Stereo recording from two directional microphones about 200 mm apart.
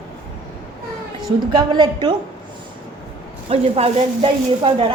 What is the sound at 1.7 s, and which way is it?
Speech, 20° right (ahead or behind).